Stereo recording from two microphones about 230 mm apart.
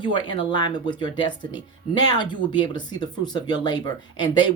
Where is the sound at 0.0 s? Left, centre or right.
Centre.